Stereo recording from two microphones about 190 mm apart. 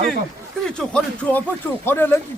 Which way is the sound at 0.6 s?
5° left (ahead or behind).